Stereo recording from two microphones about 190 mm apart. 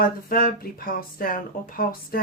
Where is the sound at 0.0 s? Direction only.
50° left (ahead or behind).